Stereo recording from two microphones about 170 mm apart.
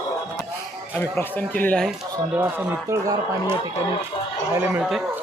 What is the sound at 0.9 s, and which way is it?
Speech, 10° left (ahead or behind).